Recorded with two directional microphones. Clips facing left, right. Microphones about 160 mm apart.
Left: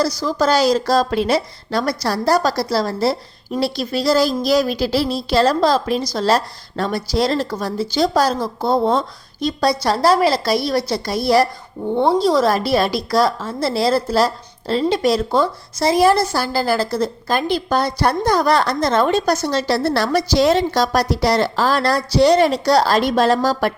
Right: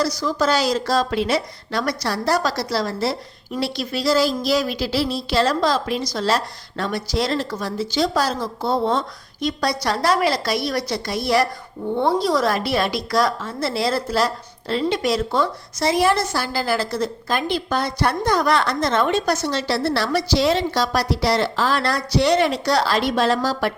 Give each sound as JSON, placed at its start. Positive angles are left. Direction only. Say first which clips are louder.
{"t": 0.2, "sound": "a woman's voice", "louder": "left 3 dB", "side_deg": 35}